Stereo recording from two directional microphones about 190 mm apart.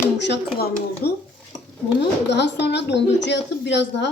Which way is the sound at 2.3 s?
65° left (ahead or behind).